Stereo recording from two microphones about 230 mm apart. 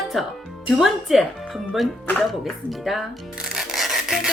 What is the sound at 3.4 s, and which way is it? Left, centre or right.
Rub, centre.